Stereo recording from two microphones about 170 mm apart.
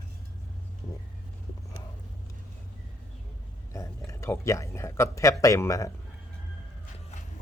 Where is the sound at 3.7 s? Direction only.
20° left (ahead or behind).